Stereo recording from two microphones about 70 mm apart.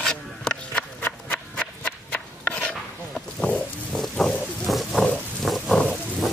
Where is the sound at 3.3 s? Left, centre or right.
Centre.